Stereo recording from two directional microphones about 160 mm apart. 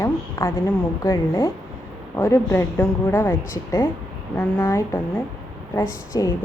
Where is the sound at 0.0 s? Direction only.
20° left (ahead or behind).